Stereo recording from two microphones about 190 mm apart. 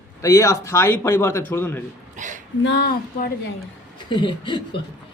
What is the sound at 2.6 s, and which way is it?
Speech, 60° left (ahead or behind).